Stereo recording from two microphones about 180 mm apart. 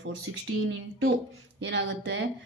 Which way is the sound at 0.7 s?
80° right.